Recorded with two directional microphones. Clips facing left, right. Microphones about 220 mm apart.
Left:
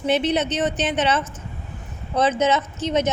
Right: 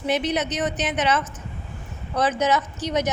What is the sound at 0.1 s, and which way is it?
A woman's voice, 30° left (ahead or behind).